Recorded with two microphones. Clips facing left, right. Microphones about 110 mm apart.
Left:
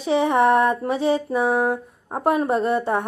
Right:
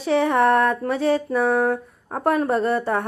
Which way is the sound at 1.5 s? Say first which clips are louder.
Right 1 dB; 10° left (ahead or behind).